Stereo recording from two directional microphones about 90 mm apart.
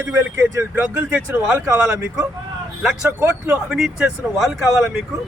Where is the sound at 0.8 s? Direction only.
20° right (ahead or behind).